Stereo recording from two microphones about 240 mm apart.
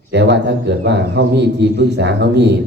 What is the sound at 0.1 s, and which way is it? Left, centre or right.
A man's voice, right.